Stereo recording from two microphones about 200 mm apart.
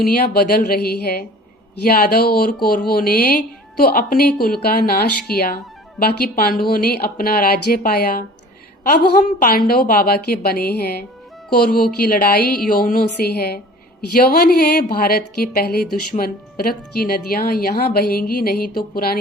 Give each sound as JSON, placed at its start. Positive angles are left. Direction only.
{"t": 0.1, "sound": "a woman's voice", "side_deg": 50}